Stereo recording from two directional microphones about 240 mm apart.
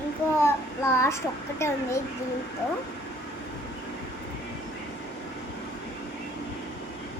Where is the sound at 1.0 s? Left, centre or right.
Centre.